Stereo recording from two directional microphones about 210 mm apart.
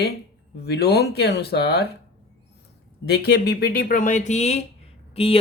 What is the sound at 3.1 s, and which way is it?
Speech, 50° left (ahead or behind).